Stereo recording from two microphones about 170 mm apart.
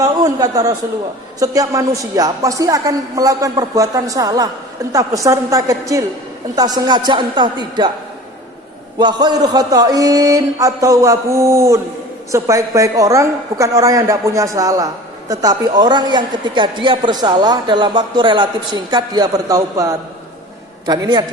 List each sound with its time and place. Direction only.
0.0 s a man's voice: 20° right (ahead or behind)
9.0 s a woman's voice: 25° right (ahead or behind)